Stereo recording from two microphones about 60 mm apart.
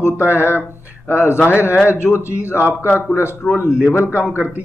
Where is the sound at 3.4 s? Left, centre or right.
Centre.